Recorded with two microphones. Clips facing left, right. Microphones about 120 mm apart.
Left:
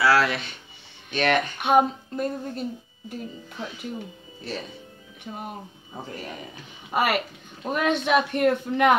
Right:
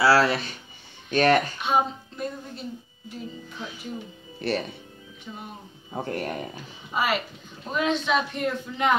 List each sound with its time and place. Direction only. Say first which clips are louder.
0.0 s speech: right 1 dB; 35° right (ahead or behind)
1.6 s speech: left 4 dB; 55° left (ahead or behind)
4.4 s speech: right 7 dB; 70° right (ahead or behind)
5.9 s speech: right 7 dB; 65° right (ahead or behind)
6.9 s a man's voice: left 2 dB; 60° left (ahead or behind)